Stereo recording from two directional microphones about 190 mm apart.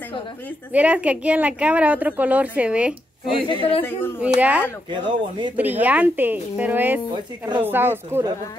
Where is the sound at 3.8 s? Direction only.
10° left (ahead or behind).